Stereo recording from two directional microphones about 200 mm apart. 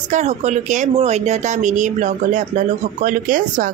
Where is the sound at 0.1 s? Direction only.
35° right (ahead or behind).